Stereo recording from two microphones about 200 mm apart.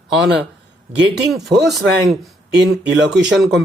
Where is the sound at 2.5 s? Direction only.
60° right (ahead or behind).